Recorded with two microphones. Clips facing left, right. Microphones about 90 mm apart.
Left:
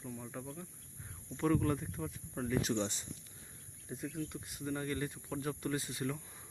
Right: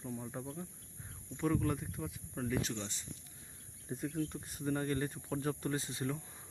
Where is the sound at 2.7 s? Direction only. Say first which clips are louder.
Left 7 dB; 20° left (ahead or behind).